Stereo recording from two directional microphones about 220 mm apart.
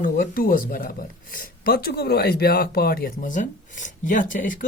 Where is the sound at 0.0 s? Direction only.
40° left (ahead or behind).